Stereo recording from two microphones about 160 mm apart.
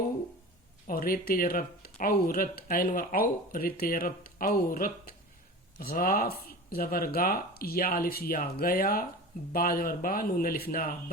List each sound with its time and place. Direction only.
0.9 s speech: 65° left (ahead or behind)